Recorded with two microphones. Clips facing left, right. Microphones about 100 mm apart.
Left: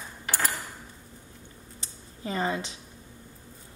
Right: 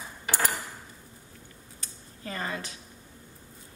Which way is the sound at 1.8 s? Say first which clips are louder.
Left 4 dB; 20° left (ahead or behind).